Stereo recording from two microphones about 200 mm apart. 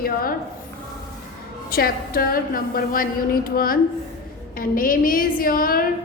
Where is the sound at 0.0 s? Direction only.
45° left (ahead or behind).